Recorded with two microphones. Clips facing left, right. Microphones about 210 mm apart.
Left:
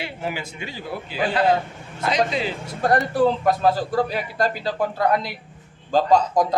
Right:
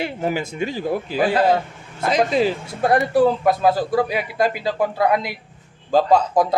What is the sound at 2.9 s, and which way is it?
A man's voice, 10° right (ahead or behind).